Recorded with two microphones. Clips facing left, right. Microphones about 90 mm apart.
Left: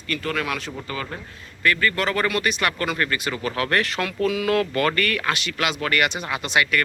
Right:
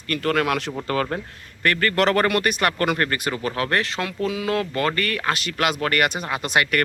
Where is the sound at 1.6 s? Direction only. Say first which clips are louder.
Right 2 dB; 55° right (ahead or behind).